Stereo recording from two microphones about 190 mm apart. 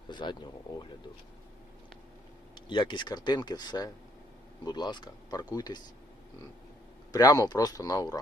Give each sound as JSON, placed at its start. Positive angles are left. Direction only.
{"t": 0.1, "sound": "a sound", "side_deg": 25}
{"t": 2.6, "sound": "speech", "side_deg": 25}
{"t": 7.1, "sound": "speech", "side_deg": 20}